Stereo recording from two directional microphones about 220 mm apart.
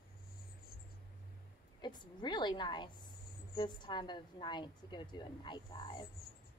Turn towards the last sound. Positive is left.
turn(degrees=20)  # may be behind; listen again after turning